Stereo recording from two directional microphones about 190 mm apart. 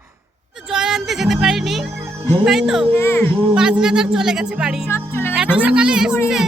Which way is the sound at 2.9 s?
15° left (ahead or behind).